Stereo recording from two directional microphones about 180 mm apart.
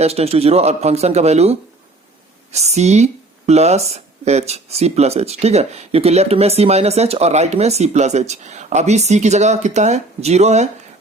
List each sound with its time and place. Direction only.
0.0 s speech: 35° right (ahead or behind)